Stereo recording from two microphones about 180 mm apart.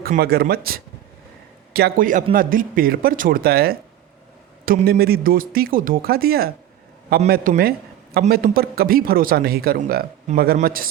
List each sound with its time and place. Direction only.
0.0 s speech: 60° right (ahead or behind)